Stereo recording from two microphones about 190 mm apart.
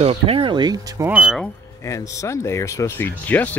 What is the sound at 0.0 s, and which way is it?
Speech, 30° right (ahead or behind).